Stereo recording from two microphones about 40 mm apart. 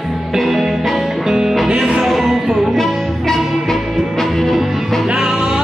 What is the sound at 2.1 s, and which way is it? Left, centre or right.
Music, centre.